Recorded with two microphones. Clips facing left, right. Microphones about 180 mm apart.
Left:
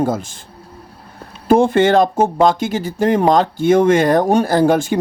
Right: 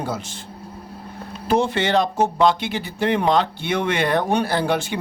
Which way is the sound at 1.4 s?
50° left (ahead or behind).